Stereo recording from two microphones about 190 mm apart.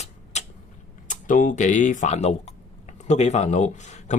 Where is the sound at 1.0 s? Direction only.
45° left (ahead or behind).